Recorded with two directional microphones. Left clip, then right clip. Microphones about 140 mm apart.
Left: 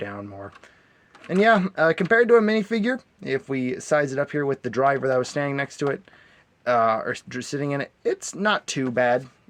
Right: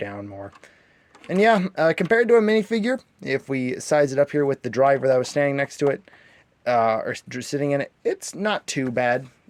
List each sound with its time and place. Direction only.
0.0 s speech: 25° right (ahead or behind)